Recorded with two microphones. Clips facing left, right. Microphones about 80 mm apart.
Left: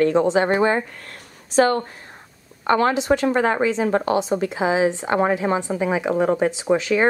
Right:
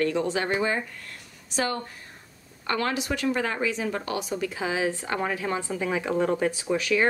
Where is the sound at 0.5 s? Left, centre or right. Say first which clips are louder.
Left 7 dB; left.